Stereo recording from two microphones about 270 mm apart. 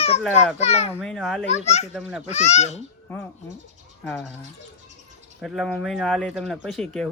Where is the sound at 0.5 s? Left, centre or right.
Left.